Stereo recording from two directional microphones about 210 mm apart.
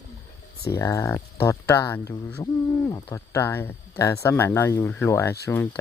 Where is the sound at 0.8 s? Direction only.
15° left (ahead or behind).